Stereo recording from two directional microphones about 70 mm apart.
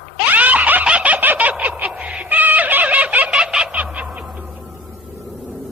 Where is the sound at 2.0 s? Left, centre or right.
Centre.